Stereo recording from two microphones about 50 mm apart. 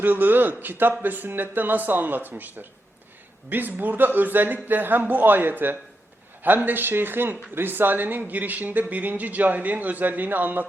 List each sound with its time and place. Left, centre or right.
0.0 s speech: right